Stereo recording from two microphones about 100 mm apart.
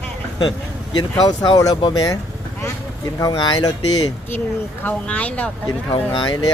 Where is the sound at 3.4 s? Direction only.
50° left (ahead or behind).